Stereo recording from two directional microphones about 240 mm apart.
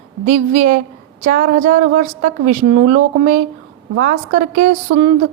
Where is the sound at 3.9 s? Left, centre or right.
Right.